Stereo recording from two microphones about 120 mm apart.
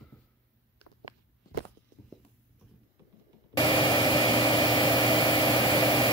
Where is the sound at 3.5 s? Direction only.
35° left (ahead or behind).